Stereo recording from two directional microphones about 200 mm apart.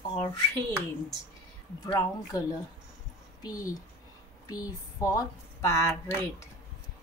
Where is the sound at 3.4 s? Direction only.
20° left (ahead or behind).